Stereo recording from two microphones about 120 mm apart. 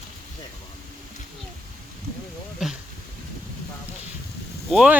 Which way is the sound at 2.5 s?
5° right (ahead or behind).